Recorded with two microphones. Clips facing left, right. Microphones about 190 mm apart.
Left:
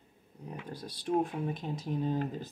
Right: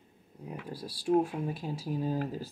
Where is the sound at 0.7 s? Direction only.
5° right (ahead or behind).